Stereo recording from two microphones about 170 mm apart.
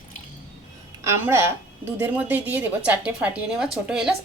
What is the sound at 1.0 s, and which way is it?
Speech, 15° right (ahead or behind).